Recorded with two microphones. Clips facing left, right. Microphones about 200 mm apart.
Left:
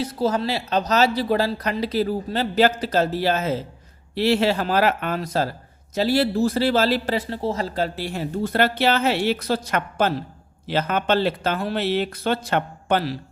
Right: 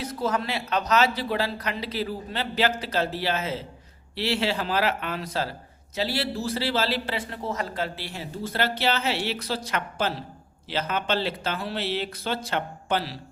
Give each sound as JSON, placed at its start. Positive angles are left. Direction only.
{"t": 0.0, "sound": "a man's voice", "side_deg": 30}